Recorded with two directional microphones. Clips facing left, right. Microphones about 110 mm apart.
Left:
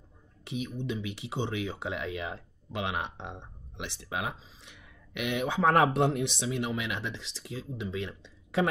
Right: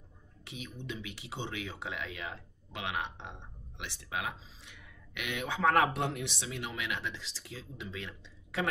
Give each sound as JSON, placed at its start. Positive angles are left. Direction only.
{"t": 0.5, "sound": "speech", "side_deg": 20}